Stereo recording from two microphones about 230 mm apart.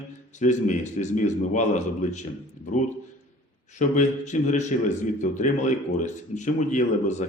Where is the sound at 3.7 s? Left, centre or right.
Left.